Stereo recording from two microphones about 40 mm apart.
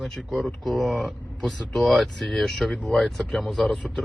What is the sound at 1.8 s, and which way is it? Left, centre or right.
Speech, centre.